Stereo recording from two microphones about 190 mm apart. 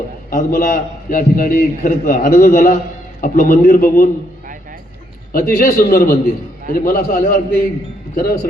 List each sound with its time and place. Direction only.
0.3 s a man's voice: 50° left (ahead or behind)
5.3 s a man's voice: 45° left (ahead or behind)